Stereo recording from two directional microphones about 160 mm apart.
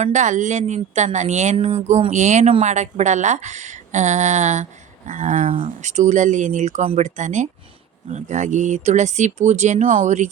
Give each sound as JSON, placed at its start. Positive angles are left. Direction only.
{"t": 0.0, "sound": "speech", "side_deg": -45}